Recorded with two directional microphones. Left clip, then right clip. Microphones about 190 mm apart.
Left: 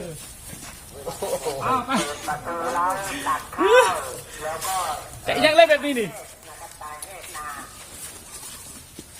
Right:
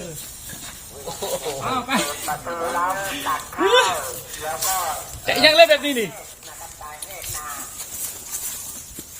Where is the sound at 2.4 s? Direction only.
40° right (ahead or behind).